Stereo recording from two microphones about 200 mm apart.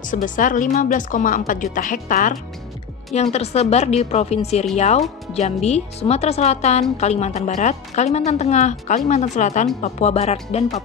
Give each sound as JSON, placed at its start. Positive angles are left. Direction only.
{"t": 0.0, "sound": "speech", "side_deg": 40}